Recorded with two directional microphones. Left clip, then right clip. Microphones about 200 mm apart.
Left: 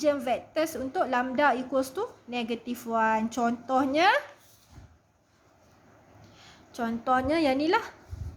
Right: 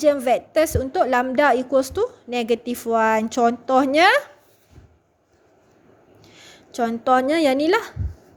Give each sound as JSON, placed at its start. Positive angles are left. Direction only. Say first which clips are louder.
{"t": 0.0, "sound": "a woman's voice", "louder": "right 9 dB", "side_deg": -30}
{"t": 6.3, "sound": "speech", "louder": "right 10 dB", "side_deg": -40}